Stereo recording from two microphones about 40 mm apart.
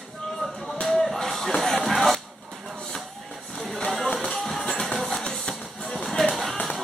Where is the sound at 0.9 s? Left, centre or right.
Centre.